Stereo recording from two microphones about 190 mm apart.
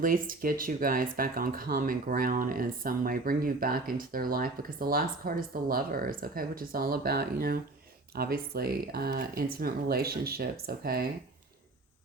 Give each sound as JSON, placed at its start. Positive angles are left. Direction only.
{"t": 0.0, "sound": "speech", "side_deg": -45}